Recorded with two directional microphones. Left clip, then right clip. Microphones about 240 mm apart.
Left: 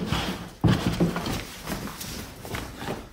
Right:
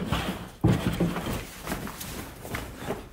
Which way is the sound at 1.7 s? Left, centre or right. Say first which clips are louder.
Even; centre.